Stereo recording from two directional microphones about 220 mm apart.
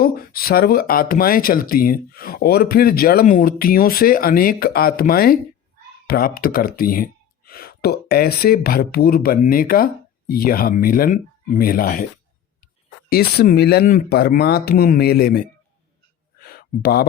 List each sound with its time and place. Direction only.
0.0 s speech: 45° left (ahead or behind)
13.1 s speech: 45° left (ahead or behind)
16.4 s a sound: 45° left (ahead or behind)